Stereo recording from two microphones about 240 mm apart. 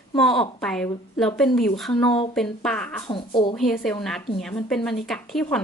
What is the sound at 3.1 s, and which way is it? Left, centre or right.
Speech, left.